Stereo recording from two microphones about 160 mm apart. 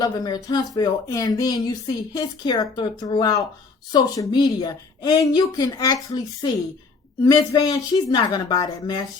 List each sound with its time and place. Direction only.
0.0 s a woman's voice: 25° left (ahead or behind)